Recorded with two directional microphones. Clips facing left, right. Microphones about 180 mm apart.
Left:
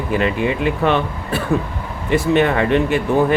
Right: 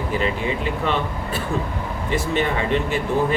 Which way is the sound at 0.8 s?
65° left (ahead or behind).